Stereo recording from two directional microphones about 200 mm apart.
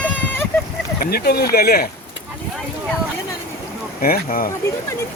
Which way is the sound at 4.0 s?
45° left (ahead or behind).